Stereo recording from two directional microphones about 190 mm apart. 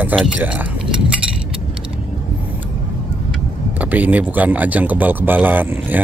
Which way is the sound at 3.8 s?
10° right (ahead or behind).